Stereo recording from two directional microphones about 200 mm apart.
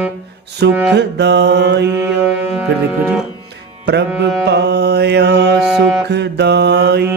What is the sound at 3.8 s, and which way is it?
Mantra, 60° right (ahead or behind).